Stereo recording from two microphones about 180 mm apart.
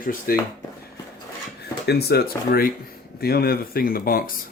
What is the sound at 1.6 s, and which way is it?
Speech, 65° left (ahead or behind).